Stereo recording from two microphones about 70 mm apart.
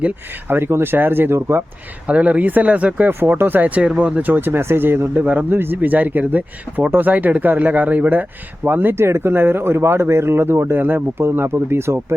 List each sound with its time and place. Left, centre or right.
0.0 s speech: right
2.0 s speech: centre; by 5.2 s right
5.2 s speech: right